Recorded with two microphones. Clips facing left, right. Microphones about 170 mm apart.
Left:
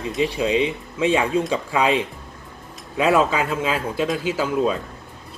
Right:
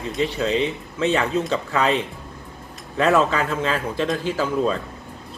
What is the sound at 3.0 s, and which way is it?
Speech, 10° left (ahead or behind).